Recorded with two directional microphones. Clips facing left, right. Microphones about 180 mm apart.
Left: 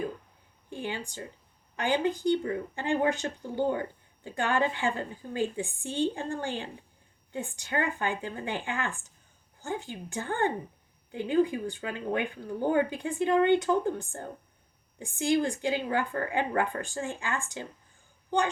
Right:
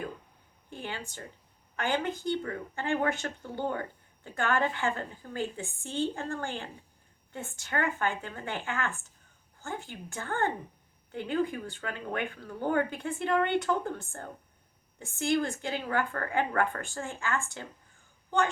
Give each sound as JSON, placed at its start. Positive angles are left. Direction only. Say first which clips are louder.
{"t": 0.7, "sound": "a woman's voice", "louder": "left 4 dB", "side_deg": 15}